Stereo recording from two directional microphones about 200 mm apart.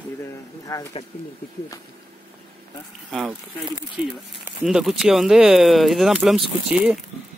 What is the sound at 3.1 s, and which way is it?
Speech, centre (ahead or behind).